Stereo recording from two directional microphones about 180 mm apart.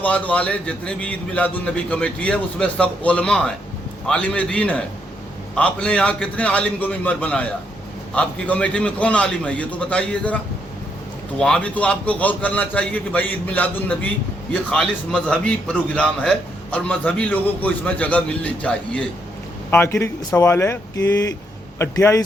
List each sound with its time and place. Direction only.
0.0 s a man's voice: 5° left (ahead or behind)